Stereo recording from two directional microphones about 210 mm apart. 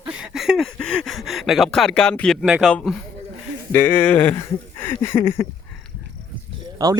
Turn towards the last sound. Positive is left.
turn(degrees=-20)  # may be behind; listen again after turning